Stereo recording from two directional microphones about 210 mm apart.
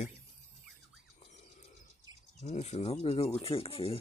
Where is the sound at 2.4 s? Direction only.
30° left (ahead or behind).